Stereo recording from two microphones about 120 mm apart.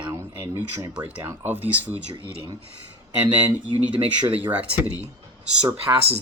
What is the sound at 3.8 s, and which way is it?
Speech, 10° right (ahead or behind).